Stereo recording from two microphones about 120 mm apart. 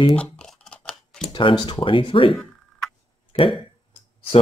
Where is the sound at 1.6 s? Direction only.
45° left (ahead or behind).